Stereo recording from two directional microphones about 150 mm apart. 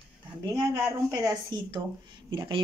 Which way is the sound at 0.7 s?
25° right (ahead or behind).